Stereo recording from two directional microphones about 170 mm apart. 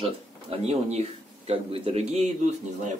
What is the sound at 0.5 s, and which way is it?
A man's voice, 40° right (ahead or behind).